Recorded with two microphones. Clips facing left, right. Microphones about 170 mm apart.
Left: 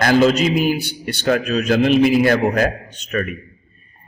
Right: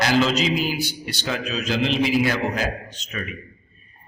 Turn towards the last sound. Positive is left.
turn(degrees=55)  # may be behind; listen again after turning